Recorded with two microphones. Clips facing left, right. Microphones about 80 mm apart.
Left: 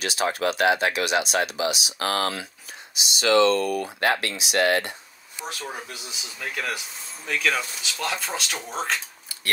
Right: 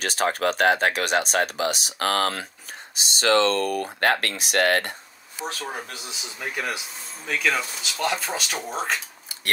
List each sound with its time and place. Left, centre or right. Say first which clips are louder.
0.0 s speech: right 1 dB; right
6.4 s speech: right 1 dB; centre